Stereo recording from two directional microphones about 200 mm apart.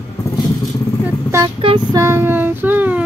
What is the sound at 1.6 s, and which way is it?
Female singing, 25° right (ahead or behind).